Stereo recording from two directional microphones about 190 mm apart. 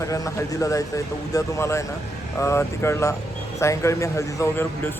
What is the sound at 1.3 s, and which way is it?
Speech, 15° left (ahead or behind).